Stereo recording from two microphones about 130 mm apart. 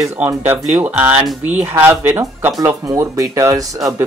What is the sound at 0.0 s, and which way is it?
Speech, 20° right (ahead or behind).